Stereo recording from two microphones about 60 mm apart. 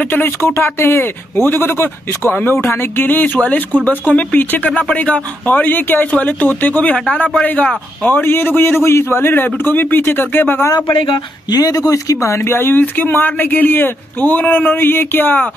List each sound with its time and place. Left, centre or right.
0.1 s speech: left
11.5 s speech: left